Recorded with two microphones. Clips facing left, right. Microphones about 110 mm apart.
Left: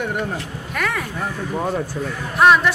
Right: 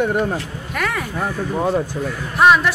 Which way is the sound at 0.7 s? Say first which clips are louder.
Right 1 dB; 5° right (ahead or behind).